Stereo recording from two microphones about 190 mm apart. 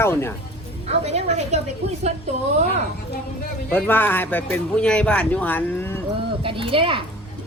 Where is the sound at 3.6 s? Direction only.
10° left (ahead or behind).